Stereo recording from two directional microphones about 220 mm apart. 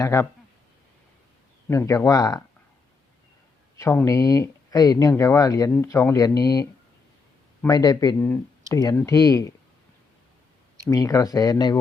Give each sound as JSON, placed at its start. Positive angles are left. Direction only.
{"t": 0.0, "sound": "speech", "side_deg": 15}
{"t": 1.6, "sound": "speech", "side_deg": 10}
{"t": 3.8, "sound": "speech", "side_deg": 15}
{"t": 10.8, "sound": "speech", "side_deg": 15}